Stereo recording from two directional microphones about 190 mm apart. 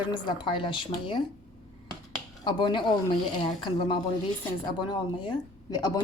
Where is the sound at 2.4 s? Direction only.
25° left (ahead or behind).